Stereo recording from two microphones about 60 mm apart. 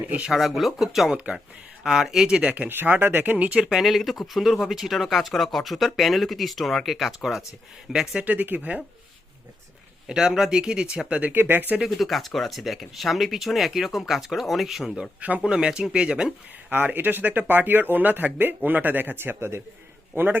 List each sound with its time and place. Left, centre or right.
0.3 s speech: centre
1.1 s speech: centre
1.8 s speech: centre
2.6 s speech: right
3.7 s speech: centre
8.2 s speech: right
10.1 s speech: centre
11.3 s speech: right
11.9 s speech: centre
15.2 s speech: right
15.4 s speech: centre
16.7 s speech: right